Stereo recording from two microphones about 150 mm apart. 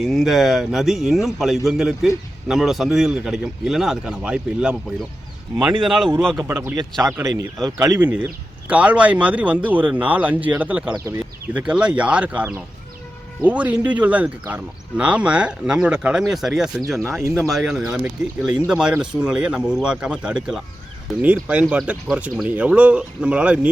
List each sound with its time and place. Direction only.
0.0 s a man's voice: centre (ahead or behind)
5.8 s a man's voice: centre (ahead or behind)
6.3 s speech: 20° right (ahead or behind)
10.9 s speech: 20° right (ahead or behind)
11.5 s a man's voice: 5° right (ahead or behind)